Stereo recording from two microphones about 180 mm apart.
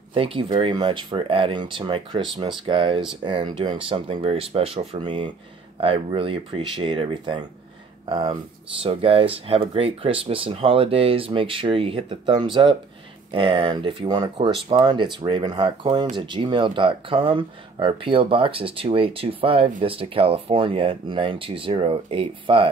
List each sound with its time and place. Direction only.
0.1 s speech: 30° right (ahead or behind)